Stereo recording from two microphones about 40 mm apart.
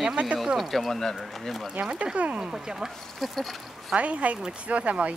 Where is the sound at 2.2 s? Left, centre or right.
Right.